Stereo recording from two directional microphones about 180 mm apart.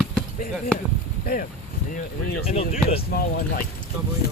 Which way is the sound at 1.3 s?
60° left (ahead or behind).